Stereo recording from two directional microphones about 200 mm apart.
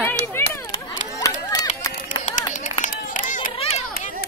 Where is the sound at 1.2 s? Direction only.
15° left (ahead or behind).